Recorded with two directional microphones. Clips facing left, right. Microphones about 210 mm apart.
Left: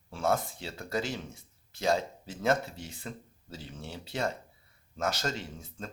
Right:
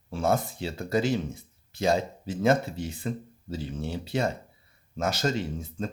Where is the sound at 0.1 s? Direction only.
15° right (ahead or behind).